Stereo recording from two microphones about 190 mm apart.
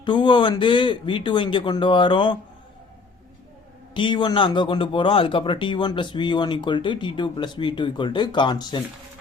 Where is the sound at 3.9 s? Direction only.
25° left (ahead or behind).